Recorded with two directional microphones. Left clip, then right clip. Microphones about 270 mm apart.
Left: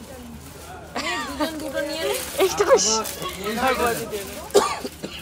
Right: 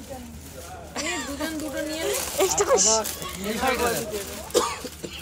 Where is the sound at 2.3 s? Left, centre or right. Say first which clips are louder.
Left 4 dB; centre.